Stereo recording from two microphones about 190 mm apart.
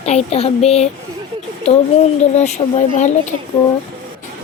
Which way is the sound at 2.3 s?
35° left (ahead or behind).